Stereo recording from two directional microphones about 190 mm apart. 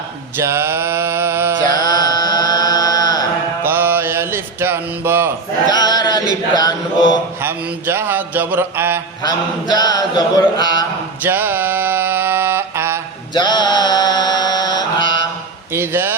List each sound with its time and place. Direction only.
0.3 s mantra: 15° right (ahead or behind)
1.7 s chant: 20° left (ahead or behind)
3.6 s mantra: 10° right (ahead or behind)
5.6 s chant: 20° left (ahead or behind)
7.4 s speech: 10° right (ahead or behind)
9.2 s chant: 20° left (ahead or behind)
11.2 s mantra: 10° right (ahead or behind)
13.3 s mantra: 25° left (ahead or behind)
15.7 s a sound: 10° right (ahead or behind)